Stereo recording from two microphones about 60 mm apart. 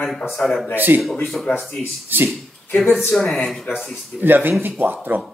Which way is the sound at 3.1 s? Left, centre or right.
Centre.